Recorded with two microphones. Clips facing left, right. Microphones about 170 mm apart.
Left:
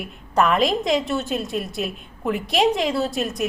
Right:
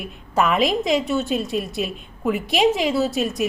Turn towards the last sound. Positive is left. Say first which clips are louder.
# right 2 dB
turn(degrees=0)  # may be behind; listen again after turning